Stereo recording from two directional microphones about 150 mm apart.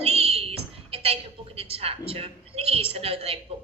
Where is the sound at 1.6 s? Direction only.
40° right (ahead or behind).